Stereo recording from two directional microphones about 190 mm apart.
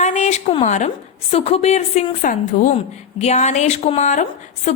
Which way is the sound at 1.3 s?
30° left (ahead or behind).